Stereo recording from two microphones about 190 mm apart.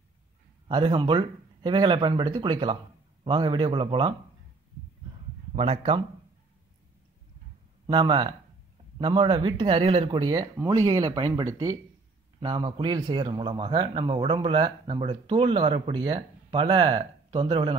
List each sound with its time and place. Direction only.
0.7 s a man's voice: 25° right (ahead or behind)
5.6 s a man's voice: 30° right (ahead or behind)
7.8 s a man's voice: 25° right (ahead or behind)